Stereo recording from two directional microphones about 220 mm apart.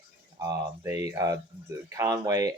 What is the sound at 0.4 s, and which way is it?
Speech, 15° right (ahead or behind).